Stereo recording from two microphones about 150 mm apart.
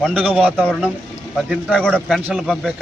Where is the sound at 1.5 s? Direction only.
5° left (ahead or behind).